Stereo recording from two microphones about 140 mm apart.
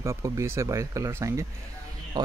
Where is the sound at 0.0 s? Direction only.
20° right (ahead or behind).